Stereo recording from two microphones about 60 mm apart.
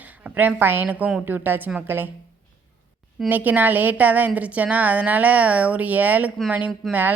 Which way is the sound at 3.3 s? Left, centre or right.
Right.